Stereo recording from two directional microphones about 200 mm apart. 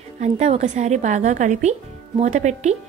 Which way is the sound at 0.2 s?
35° right (ahead or behind).